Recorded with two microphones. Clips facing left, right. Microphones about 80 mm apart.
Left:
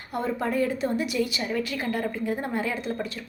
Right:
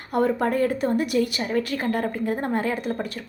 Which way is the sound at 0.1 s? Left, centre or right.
Right.